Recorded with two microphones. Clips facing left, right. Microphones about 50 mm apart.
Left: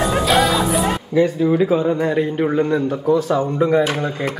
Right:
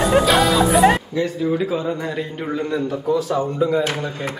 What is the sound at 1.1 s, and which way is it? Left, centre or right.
Speech, left.